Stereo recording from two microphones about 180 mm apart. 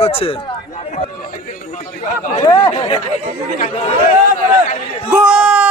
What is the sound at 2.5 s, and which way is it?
Speech, 20° left (ahead or behind).